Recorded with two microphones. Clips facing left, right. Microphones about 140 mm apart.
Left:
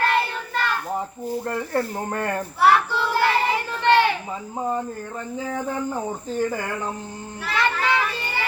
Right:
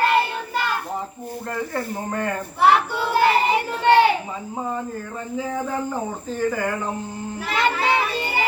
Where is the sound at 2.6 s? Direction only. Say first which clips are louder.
Right 1 dB; 15° right (ahead or behind).